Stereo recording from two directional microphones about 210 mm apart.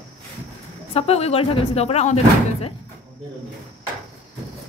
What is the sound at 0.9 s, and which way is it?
Speech, 30° left (ahead or behind).